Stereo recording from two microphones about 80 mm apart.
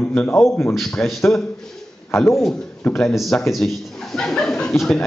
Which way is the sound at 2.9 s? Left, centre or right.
Centre.